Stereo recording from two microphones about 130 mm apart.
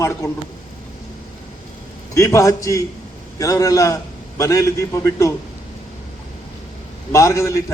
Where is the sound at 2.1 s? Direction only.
25° left (ahead or behind).